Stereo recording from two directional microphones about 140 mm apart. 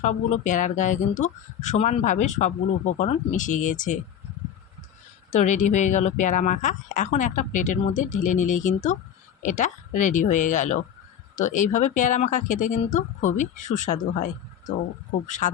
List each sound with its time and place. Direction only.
0.0 s speech: 60° left (ahead or behind)
5.3 s speech: 60° left (ahead or behind)
15.3 s speech: 60° left (ahead or behind)